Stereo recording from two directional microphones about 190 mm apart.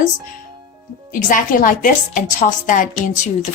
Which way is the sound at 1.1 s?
45° left (ahead or behind).